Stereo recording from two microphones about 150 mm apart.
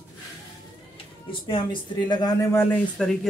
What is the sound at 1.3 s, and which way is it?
Speech, 35° left (ahead or behind).